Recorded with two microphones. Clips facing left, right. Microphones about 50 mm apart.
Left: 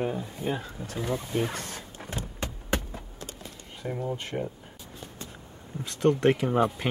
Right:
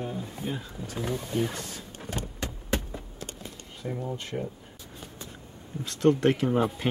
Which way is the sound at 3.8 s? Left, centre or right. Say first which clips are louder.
Left 2 dB; left.